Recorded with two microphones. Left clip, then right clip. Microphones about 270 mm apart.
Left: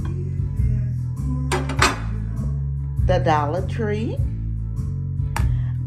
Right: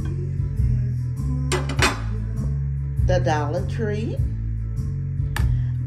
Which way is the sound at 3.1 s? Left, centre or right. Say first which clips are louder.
Left 3 dB; centre.